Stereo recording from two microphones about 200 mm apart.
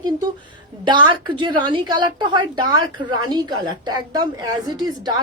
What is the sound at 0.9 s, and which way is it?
A woman's voice, 25° right (ahead or behind).